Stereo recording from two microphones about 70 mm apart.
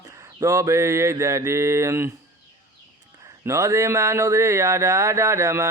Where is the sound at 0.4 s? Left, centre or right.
Right.